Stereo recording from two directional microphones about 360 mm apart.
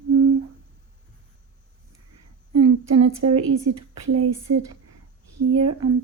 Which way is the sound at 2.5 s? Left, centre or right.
Right.